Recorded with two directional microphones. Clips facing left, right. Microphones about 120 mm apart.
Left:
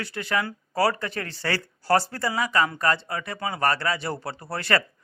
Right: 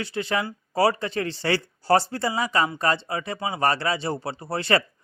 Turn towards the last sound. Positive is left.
turn(degrees=-20)  # may be behind; listen again after turning